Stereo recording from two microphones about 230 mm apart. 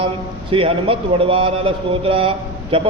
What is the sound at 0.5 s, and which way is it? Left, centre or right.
Mantra, right.